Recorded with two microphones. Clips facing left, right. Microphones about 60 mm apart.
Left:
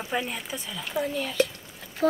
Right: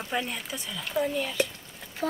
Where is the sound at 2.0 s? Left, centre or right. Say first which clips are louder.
Left 6 dB; left.